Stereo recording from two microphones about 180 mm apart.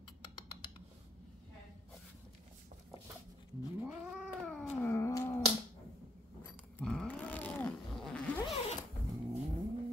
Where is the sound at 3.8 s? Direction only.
Centre (ahead or behind).